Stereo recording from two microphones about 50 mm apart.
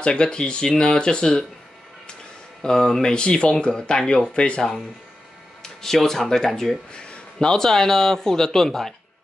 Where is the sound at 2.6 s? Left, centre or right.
Centre.